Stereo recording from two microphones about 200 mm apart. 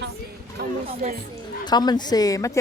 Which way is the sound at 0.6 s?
50° right (ahead or behind).